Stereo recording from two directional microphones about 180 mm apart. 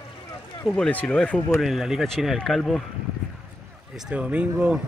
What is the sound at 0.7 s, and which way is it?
Speech, 5° left (ahead or behind).